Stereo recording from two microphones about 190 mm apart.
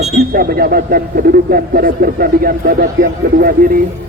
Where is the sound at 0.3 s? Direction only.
50° right (ahead or behind).